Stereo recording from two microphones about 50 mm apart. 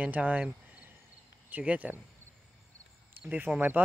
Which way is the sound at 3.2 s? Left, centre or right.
Right.